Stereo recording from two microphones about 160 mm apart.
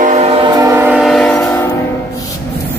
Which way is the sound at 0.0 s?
45° right (ahead or behind).